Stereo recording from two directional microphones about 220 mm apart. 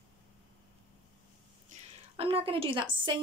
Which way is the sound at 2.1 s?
25° right (ahead or behind).